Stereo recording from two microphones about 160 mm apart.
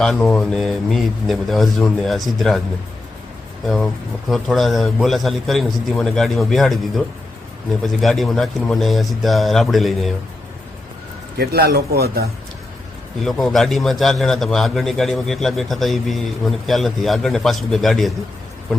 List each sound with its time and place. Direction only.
0.0 s a man's voice: 5° left (ahead or behind)
4.3 s a man's voice: centre (ahead or behind)
11.3 s speech: 85° right
13.2 s a man's voice: centre (ahead or behind)